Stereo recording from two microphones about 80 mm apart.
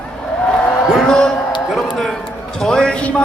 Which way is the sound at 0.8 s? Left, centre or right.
Centre.